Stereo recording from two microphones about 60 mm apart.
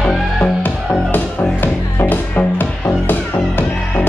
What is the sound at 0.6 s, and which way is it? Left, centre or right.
Music, left.